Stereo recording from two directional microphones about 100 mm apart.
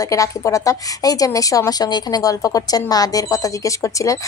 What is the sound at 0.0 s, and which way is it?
A woman's voice, 35° left (ahead or behind).